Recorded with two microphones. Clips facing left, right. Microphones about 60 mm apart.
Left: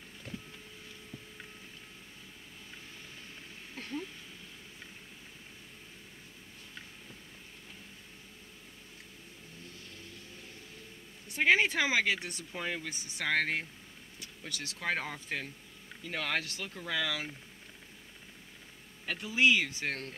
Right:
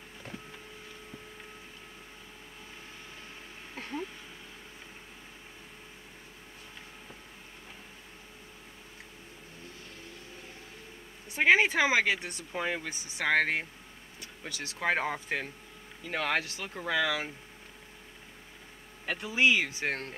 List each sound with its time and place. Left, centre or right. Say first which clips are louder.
0.3 s vehicle: even; centre
3.7 s a sound: right 2 dB; centre
11.2 s speech: right 3 dB; centre
12.5 s speech: right 4 dB; centre
14.8 s speech: right 6 dB; centre
19.1 s speech: right 1 dB; centre